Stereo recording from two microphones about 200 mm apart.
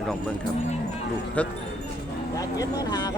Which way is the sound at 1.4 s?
5° left (ahead or behind).